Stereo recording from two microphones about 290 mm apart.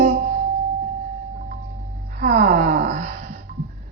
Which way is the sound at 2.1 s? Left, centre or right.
Right.